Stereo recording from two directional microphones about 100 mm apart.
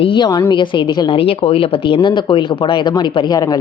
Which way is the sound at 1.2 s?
70° left (ahead or behind).